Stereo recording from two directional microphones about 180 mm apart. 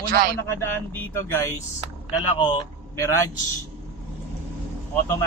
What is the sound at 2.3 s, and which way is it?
Speech, 25° left (ahead or behind).